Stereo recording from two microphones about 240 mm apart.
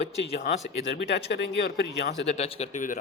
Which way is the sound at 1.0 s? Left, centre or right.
Left.